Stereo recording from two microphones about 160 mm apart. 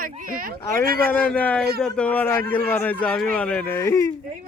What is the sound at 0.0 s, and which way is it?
A child's voice, 60° right (ahead or behind).